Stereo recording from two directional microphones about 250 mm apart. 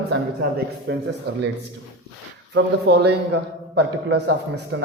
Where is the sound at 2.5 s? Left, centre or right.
Right.